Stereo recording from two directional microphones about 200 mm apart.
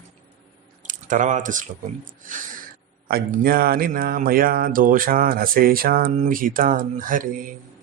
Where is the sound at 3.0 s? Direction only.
45° right (ahead or behind).